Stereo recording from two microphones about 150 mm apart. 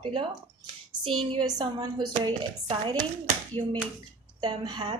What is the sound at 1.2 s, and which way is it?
A woman's voice, 30° right (ahead or behind).